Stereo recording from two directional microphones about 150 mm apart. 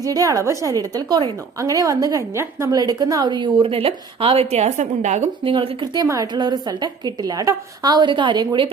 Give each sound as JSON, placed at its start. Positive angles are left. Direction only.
{"t": 0.0, "sound": "a woman's voice", "side_deg": -25}
{"t": 5.4, "sound": "a woman's voice", "side_deg": -35}